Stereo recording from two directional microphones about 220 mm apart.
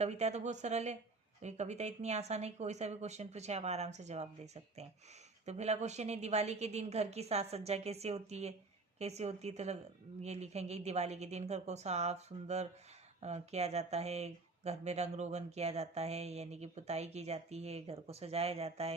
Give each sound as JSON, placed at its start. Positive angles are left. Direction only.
{"t": 0.0, "sound": "speech", "side_deg": -30}